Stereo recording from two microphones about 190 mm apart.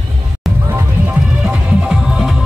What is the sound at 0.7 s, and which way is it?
Music, 10° right (ahead or behind).